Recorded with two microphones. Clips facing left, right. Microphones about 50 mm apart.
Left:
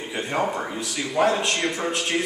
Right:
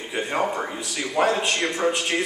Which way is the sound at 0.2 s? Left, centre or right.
Centre.